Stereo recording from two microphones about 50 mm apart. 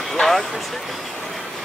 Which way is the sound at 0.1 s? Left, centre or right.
Centre.